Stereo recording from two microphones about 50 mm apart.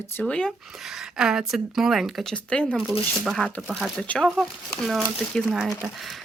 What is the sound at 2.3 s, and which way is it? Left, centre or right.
Speech, left.